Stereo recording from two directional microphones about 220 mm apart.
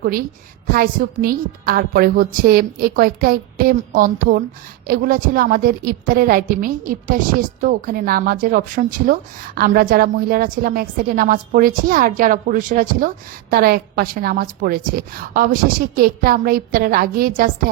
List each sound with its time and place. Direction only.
0.0 s a woman's voice: 40° right (ahead or behind)